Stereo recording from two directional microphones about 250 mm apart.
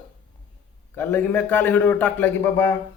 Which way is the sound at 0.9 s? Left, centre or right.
Centre.